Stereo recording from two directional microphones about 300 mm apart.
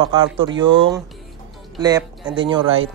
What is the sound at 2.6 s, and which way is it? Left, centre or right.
Speech, right.